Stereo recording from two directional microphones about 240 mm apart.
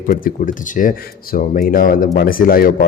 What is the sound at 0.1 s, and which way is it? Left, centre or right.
A man's voice, left.